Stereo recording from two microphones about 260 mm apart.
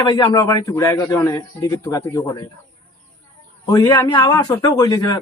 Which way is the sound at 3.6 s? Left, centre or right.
Centre.